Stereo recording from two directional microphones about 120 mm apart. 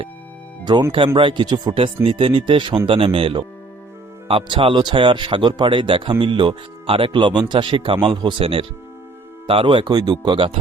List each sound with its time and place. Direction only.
0.9 s speech: 45° right (ahead or behind)